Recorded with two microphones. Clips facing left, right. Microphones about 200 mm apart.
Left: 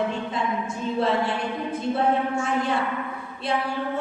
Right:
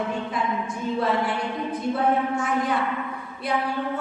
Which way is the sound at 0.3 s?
25° left (ahead or behind).